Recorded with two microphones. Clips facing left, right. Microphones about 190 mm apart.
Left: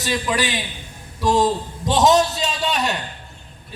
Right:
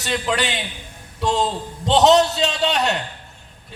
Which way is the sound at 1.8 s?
65° right (ahead or behind).